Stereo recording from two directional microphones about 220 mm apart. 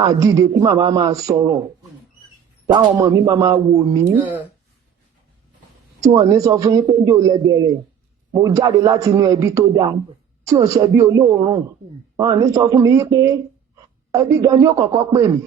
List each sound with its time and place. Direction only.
0.0 s a man's voice: 15° right (ahead or behind)
2.7 s a man's voice: 20° right (ahead or behind)
6.1 s a man's voice: 15° right (ahead or behind)